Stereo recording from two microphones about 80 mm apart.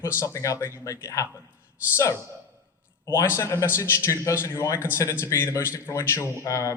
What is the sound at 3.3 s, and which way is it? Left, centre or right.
Speech, left.